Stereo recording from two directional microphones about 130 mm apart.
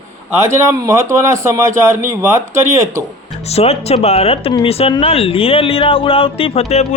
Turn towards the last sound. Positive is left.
turn(degrees=55)  # may be behind; listen again after turning